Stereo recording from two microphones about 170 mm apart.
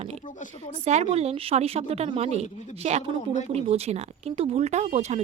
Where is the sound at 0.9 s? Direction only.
40° right (ahead or behind).